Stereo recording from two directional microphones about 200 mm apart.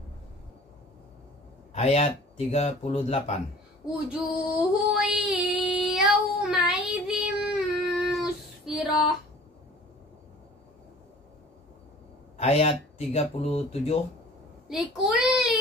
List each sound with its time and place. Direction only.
1.7 s speech: 30° left (ahead or behind)
4.1 s female singing: centre (ahead or behind)
6.9 s child singing: 5° right (ahead or behind)
12.4 s speech: 30° left (ahead or behind)
14.7 s child singing: centre (ahead or behind)